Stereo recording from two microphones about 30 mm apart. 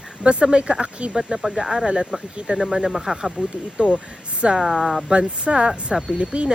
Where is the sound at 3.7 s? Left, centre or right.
Right.